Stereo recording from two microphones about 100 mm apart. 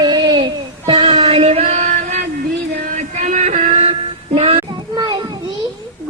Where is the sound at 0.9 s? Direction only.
90° right.